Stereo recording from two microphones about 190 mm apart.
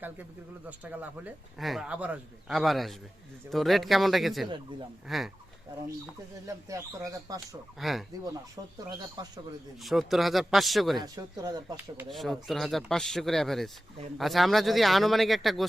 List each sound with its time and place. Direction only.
0.9 s a man's voice: 5° right (ahead or behind)
6.5 s speech: 15° right (ahead or behind)
7.8 s a man's voice: centre (ahead or behind)
9.2 s speech: 20° right (ahead or behind)
9.8 s a man's voice: centre (ahead or behind)
11.0 s speech: 20° right (ahead or behind)
12.0 s a man's voice: centre (ahead or behind)